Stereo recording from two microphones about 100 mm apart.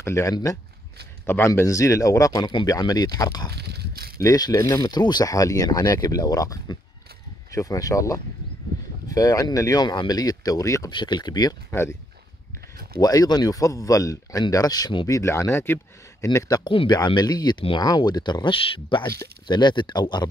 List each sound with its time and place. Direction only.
0.0 s speech: 30° left (ahead or behind)
1.2 s speech: 25° left (ahead or behind)
4.9 s speech: 45° left (ahead or behind)
10.9 s speech: 50° left (ahead or behind)
11.7 s speech: 25° left (ahead or behind)
13.0 s speech: 40° left (ahead or behind)
15.0 s speech: 30° left (ahead or behind)
16.3 s speech: 40° left (ahead or behind)
16.6 s speech: 55° left (ahead or behind)
17.6 s speech: 60° left (ahead or behind)
17.8 s speech: 45° left (ahead or behind)